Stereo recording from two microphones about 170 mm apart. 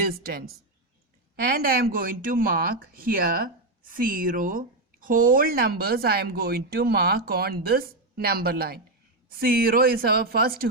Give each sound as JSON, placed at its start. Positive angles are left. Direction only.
{"t": 0.1, "sound": "speech", "side_deg": -65}